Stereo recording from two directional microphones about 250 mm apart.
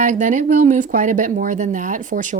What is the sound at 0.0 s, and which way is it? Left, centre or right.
Speech, right.